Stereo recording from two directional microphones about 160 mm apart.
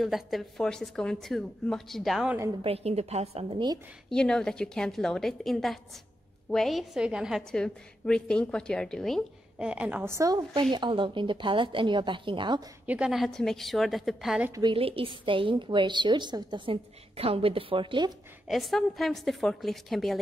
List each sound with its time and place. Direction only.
0.0 s a woman's voice: centre (ahead or behind)
2.6 s a woman's voice: 40° right (ahead or behind)
4.1 s a woman's voice: 5° left (ahead or behind); by 12.6 s 30° right (ahead or behind)
12.8 s a woman's voice: 5° right (ahead or behind)
14.5 s a woman's voice: 30° right (ahead or behind)
18.5 s a woman's voice: centre (ahead or behind)